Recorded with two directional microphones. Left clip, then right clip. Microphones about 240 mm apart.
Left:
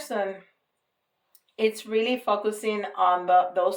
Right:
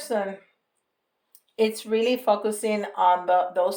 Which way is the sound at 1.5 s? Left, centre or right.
Right.